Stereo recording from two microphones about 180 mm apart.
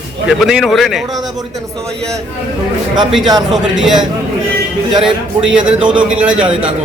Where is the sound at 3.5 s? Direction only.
Centre (ahead or behind).